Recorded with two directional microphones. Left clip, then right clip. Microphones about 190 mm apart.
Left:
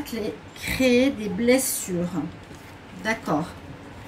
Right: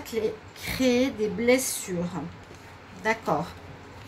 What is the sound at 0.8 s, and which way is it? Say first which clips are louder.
Speech: left 3 dB; 50° right (ahead or behind).